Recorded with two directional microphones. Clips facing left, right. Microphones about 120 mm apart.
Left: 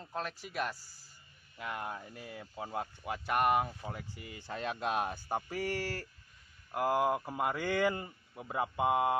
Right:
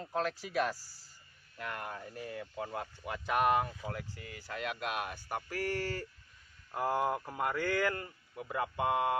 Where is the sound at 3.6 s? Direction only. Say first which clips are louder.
Right 1 dB; 15° left (ahead or behind).